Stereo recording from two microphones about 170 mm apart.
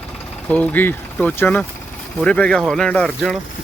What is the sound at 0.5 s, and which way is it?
Speech, 10° left (ahead or behind).